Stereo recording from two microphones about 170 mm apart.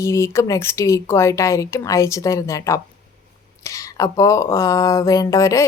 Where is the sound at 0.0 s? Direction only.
15° left (ahead or behind).